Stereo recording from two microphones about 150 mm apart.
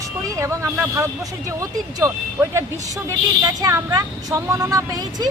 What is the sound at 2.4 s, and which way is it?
Speech, 15° right (ahead or behind).